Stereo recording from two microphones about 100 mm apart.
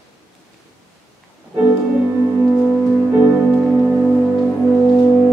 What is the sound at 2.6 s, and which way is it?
Music, 5° left (ahead or behind).